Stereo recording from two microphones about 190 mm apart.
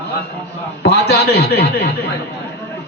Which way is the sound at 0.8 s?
60° left (ahead or behind).